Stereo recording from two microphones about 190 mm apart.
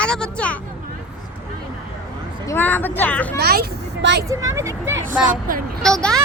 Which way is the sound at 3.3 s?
55° right (ahead or behind).